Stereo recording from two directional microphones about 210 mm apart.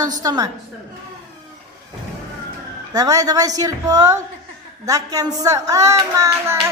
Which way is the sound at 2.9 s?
15° right (ahead or behind).